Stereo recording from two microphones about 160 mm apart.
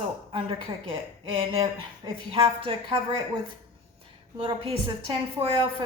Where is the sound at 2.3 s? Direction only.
35° right (ahead or behind).